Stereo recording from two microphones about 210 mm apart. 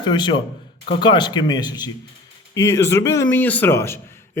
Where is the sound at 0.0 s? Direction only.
20° left (ahead or behind).